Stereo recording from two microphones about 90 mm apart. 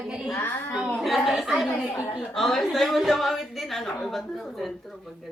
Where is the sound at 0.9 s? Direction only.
Centre (ahead or behind).